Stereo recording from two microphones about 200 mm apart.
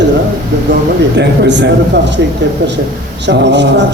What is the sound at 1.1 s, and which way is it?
A man's voice, 60° right (ahead or behind).